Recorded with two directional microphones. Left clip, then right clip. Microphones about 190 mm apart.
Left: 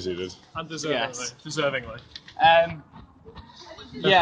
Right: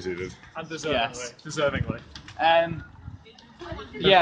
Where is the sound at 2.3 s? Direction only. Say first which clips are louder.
Left 3 dB; 25° left (ahead or behind).